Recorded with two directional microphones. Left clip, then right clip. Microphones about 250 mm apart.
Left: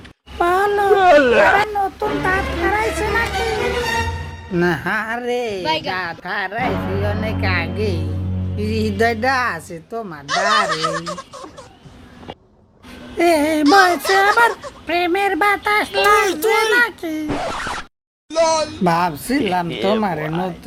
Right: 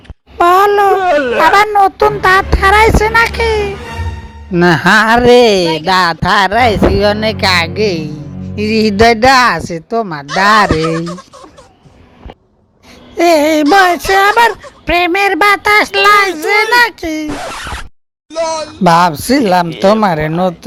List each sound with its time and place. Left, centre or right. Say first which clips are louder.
0.3 s a sound: right 9 dB; right
0.9 s a sound: right 1 dB; centre
1.7 s speech: right 11 dB; right
4.5 s speech: right 11 dB; right
10.7 s speech: right 6 dB; centre
13.1 s speech: right 7 dB; centre
17.2 s speech: right 2 dB; centre
18.3 s speech: even; centre
18.8 s speech: right 9 dB; right